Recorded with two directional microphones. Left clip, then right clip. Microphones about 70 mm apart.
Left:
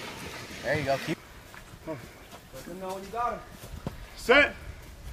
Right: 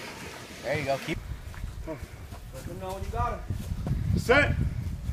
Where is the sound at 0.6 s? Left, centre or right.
Left.